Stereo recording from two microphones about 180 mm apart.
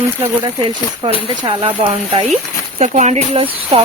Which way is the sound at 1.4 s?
25° right (ahead or behind).